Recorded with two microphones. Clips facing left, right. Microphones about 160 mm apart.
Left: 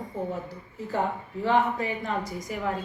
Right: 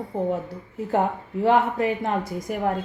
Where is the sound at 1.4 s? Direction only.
60° right (ahead or behind).